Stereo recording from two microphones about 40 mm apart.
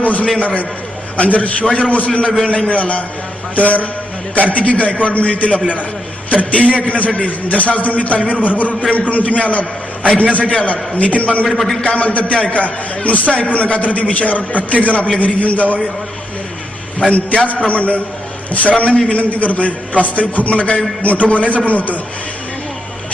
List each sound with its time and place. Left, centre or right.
0.0 s a man's voice: left
11.4 s a man's voice: centre
11.8 s a man's voice: left
12.6 s a man's voice: left
17.1 s a man's voice: left
19.1 s a man's voice: left